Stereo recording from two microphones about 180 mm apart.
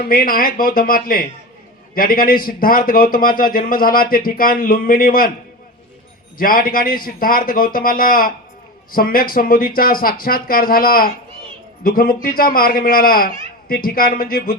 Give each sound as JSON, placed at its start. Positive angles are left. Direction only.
{"t": 0.1, "sound": "a man's voice", "side_deg": 55}
{"t": 6.3, "sound": "a man's voice", "side_deg": 50}